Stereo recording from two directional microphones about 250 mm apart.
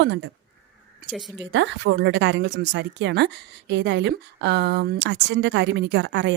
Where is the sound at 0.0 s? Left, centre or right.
Right.